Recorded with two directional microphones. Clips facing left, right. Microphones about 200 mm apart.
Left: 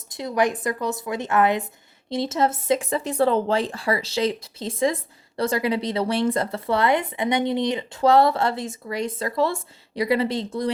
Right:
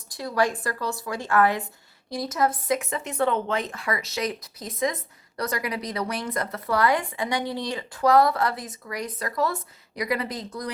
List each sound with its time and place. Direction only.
0.1 s speech: 20° left (ahead or behind)